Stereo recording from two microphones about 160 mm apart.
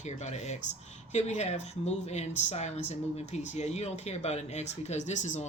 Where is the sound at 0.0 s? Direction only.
45° left (ahead or behind).